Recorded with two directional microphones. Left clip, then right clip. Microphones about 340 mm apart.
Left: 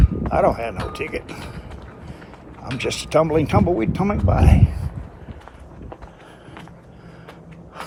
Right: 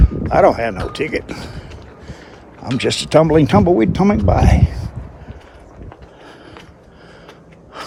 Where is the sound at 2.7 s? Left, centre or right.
Right.